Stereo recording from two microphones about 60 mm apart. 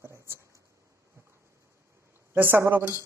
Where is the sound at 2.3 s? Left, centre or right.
Right.